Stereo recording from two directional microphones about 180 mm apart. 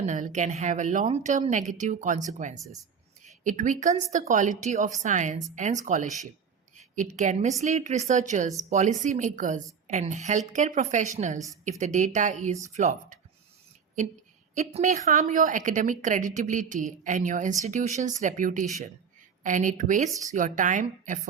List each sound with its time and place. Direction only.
0.0 s a woman's voice: 40° right (ahead or behind)
14.5 s a woman's voice: 40° right (ahead or behind)